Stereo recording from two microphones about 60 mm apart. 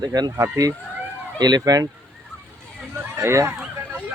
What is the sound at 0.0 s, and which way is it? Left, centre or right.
Speech, right.